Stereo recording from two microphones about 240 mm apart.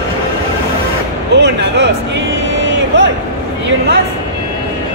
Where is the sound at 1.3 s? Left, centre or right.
Right.